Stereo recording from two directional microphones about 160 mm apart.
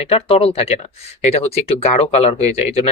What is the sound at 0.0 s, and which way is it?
Speech, 40° left (ahead or behind).